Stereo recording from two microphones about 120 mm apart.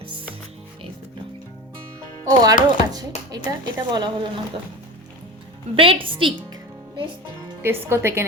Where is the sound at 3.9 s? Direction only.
40° right (ahead or behind).